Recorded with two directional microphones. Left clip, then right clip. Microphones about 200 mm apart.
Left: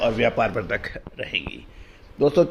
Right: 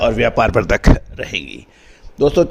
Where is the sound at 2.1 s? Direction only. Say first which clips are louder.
Right 5 dB; 40° right (ahead or behind).